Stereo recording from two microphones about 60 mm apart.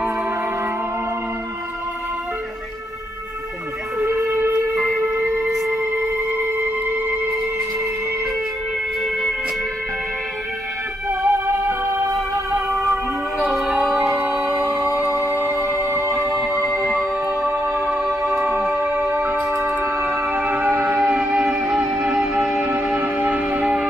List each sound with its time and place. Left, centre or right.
4.3 s music: right
11.1 s music: right
12.9 s music: centre
15.8 s music: right
18.4 s music: right
20.9 s music: centre
22.9 s shofar: right